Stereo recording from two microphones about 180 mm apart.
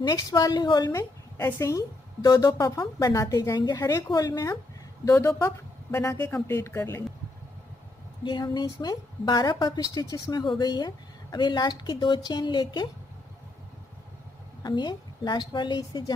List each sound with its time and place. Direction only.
0.0 s a woman's voice: 20° left (ahead or behind)
8.2 s a woman's voice: 25° left (ahead or behind)
14.6 s a woman's voice: 25° left (ahead or behind)